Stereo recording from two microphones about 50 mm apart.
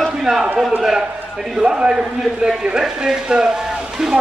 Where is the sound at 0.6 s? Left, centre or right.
Centre.